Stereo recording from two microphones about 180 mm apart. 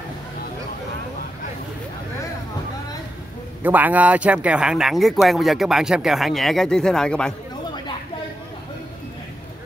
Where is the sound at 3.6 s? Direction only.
10° right (ahead or behind).